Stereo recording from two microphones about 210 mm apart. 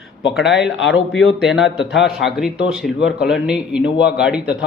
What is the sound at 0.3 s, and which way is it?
Speech, 60° left (ahead or behind).